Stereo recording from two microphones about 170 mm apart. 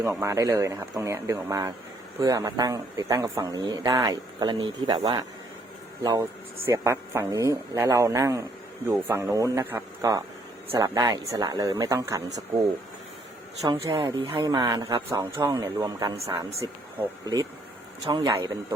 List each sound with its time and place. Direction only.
0.0 s a man's voice: 15° right (ahead or behind)
13.6 s a man's voice: 20° right (ahead or behind)